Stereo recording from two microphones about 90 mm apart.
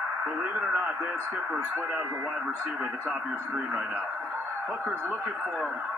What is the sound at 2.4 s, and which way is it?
Speech, 10° right (ahead or behind).